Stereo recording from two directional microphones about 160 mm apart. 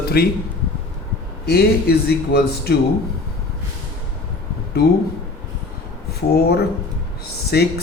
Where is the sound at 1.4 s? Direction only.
80° left.